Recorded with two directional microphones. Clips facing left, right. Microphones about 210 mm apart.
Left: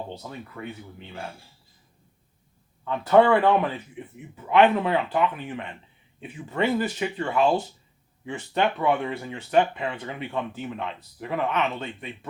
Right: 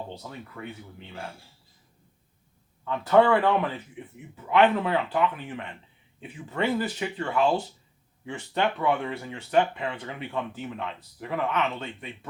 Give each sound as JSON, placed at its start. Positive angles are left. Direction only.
{"t": 0.6, "sound": "speech", "side_deg": 20}
{"t": 2.8, "sound": "speech", "side_deg": 20}